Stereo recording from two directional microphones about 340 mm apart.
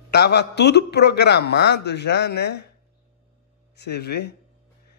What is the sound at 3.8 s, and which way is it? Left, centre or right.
Speech, left.